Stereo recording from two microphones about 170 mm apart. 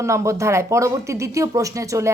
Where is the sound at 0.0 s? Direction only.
15° right (ahead or behind).